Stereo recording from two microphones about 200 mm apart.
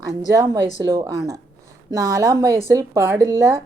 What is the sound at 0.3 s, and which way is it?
A woman's voice, 20° right (ahead or behind).